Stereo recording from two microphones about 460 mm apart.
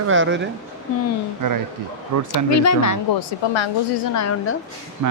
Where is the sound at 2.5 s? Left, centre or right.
Left.